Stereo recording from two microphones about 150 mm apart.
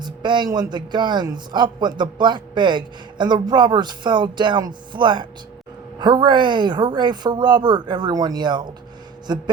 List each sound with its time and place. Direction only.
0.0 s a man's voice: 30° right (ahead or behind)